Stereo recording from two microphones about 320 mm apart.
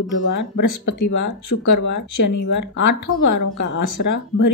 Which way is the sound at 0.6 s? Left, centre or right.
Left.